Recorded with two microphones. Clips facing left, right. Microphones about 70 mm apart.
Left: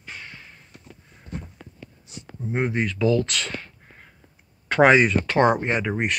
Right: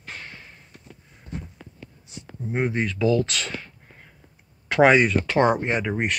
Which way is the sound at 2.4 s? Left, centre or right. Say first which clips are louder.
Even; centre.